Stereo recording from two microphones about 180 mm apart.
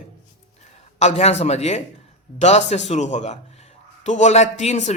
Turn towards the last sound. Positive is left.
turn(degrees=40)  # may be behind; listen again after turning